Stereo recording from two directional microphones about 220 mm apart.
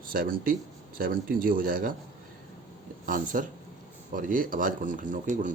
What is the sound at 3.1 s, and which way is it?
Speech, 40° right (ahead or behind).